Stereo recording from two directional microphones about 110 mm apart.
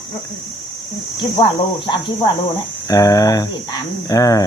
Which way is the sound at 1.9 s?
45° left (ahead or behind).